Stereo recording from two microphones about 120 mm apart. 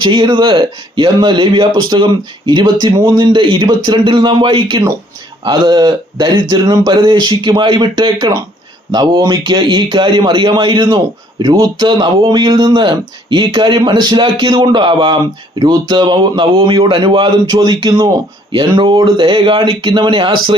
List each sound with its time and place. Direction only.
0.0 s speech: 40° right (ahead or behind)